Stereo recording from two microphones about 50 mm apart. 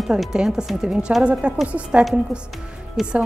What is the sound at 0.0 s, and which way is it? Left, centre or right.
A woman's voice, centre.